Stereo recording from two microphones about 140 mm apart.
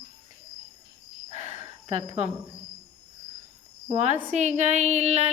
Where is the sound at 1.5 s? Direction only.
50° right (ahead or behind).